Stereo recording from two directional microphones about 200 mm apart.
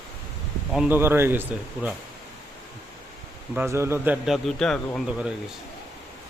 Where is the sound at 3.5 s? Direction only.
15° right (ahead or behind).